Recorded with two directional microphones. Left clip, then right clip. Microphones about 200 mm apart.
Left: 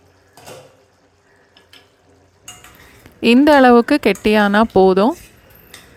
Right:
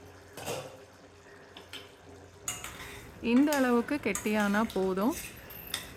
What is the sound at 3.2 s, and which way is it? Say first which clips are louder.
Speech: left 17 dB; 45° left (ahead or behind).